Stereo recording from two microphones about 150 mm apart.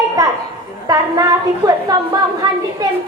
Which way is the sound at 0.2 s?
20° right (ahead or behind).